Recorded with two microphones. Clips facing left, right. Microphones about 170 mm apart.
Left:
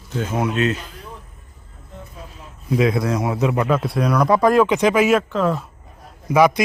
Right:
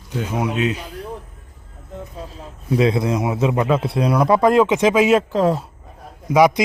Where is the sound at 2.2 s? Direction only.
35° right (ahead or behind).